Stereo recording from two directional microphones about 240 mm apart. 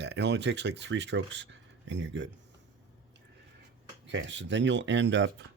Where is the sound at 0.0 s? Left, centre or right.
Right.